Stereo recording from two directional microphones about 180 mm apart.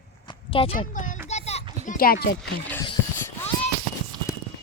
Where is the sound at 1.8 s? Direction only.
55° left (ahead or behind).